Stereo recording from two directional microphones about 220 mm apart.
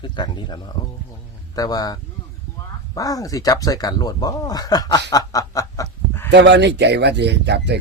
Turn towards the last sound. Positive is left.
turn(degrees=-50)  # may be behind; listen again after turning